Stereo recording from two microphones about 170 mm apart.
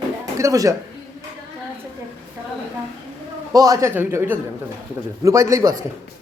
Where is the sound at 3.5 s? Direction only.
20° right (ahead or behind).